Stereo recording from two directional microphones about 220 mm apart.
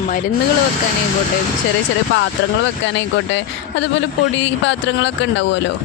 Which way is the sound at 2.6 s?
55° left (ahead or behind).